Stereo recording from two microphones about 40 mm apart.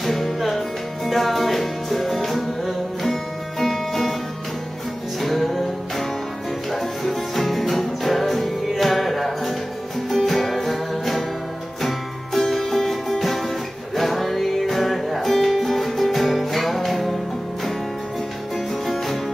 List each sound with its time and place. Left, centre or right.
0.0 s music: centre
5.2 s music: centre
12.4 s music: centre